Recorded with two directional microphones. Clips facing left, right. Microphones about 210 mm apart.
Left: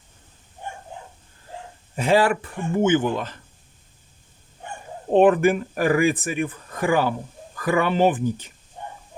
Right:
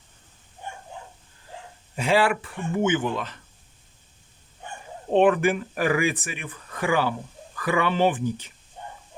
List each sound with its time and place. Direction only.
2.0 s speech: 45° left (ahead or behind)
5.1 s speech: 45° left (ahead or behind)